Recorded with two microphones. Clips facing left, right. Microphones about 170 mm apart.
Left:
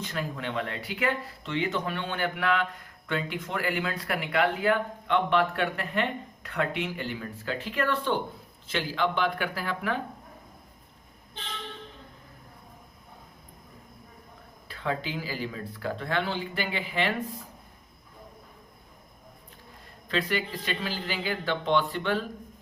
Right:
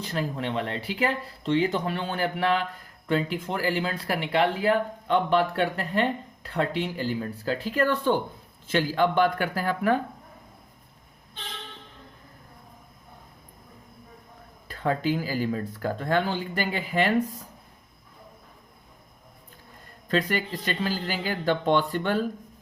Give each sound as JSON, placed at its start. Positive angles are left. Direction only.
{"t": 0.0, "sound": "speech", "side_deg": -30}
{"t": 14.7, "sound": "speech", "side_deg": -45}
{"t": 20.1, "sound": "speech", "side_deg": -45}